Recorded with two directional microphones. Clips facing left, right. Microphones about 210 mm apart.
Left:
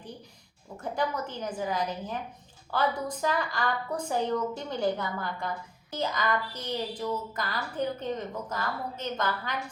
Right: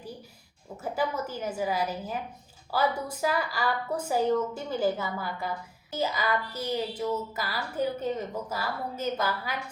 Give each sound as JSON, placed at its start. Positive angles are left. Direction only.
{"t": 0.8, "sound": "a woman's voice", "side_deg": -5}